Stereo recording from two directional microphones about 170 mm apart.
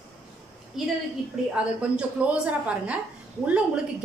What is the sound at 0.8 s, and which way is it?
A woman's voice, centre (ahead or behind).